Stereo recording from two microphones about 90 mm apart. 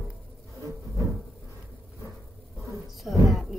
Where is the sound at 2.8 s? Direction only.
Centre (ahead or behind).